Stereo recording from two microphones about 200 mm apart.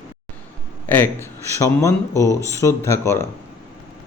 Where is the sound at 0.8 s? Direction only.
10° left (ahead or behind).